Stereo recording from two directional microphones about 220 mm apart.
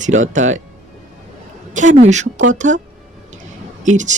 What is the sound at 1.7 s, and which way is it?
Speech, 30° right (ahead or behind).